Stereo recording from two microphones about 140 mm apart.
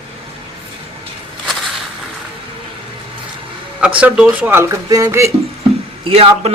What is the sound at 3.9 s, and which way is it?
Speech, 5° right (ahead or behind).